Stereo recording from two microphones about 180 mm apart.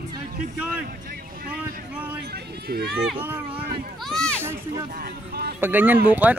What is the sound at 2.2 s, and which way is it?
Run, 60° right (ahead or behind).